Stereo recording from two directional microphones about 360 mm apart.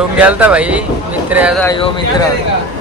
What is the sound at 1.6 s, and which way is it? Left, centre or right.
Speech, centre.